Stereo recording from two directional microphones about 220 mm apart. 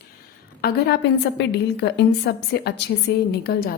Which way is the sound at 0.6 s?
45° left (ahead or behind).